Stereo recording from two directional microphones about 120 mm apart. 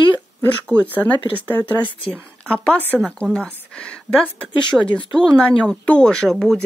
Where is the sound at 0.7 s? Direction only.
15° left (ahead or behind).